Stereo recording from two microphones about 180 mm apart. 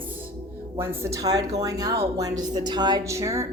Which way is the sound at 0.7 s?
15° right (ahead or behind).